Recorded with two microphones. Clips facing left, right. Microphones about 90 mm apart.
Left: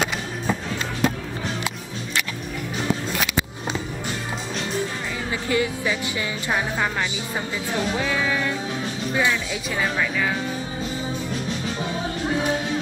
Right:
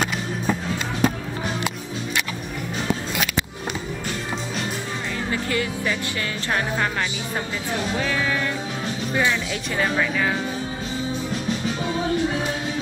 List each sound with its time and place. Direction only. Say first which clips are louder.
5.3 s music: left 3 dB; 15° left (ahead or behind)
8.0 s music: even; 10° left (ahead or behind)
9.1 s speech: even; centre (ahead or behind)